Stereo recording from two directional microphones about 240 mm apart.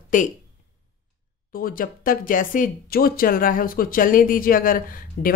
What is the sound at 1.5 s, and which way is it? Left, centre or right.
Speech, left.